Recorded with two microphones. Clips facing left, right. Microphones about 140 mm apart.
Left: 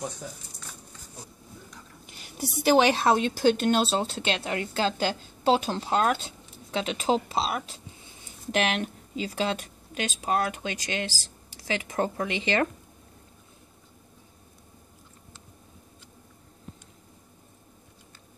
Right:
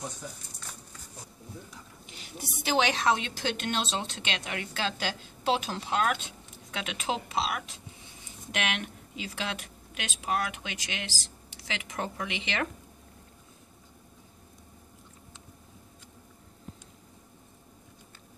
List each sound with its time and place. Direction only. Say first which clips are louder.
2.0 s a woman's voice: left 8 dB; 45° left (ahead or behind)